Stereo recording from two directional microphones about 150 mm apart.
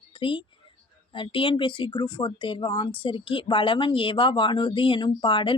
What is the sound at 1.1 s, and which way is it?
Speech, 35° left (ahead or behind).